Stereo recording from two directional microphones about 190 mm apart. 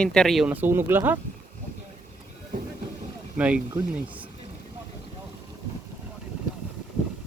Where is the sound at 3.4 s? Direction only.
5° right (ahead or behind).